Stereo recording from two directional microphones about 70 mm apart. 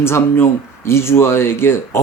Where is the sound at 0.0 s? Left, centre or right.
Left.